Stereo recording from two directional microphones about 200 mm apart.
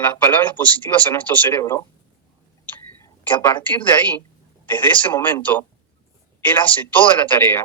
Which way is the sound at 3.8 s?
10° left (ahead or behind).